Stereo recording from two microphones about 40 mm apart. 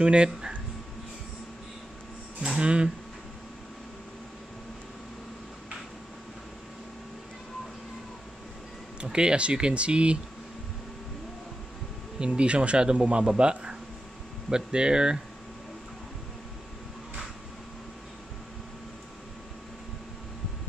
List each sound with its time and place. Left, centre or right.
0.0 s speech: right
2.6 s speech: right
9.0 s speech: right
12.4 s speech: right
13.2 s speech: centre
14.5 s speech: right